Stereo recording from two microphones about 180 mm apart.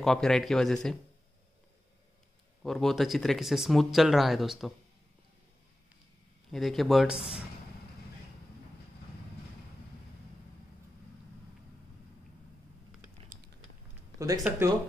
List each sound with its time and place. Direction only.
0.0 s speech: 5° left (ahead or behind)
2.6 s speech: centre (ahead or behind)
6.5 s speech: centre (ahead or behind)
13.3 s a sound: 45° right (ahead or behind)
14.1 s speech: 20° right (ahead or behind)